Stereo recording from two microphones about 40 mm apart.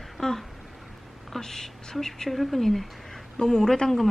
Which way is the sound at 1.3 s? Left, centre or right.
Centre.